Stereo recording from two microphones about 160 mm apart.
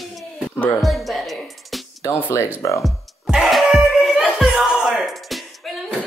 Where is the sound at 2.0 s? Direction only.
15° left (ahead or behind).